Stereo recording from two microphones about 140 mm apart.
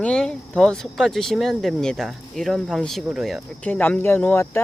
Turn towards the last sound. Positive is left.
turn(degrees=10)  # may be behind; listen again after turning